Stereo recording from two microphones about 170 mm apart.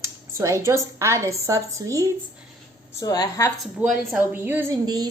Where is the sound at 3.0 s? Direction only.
20° left (ahead or behind).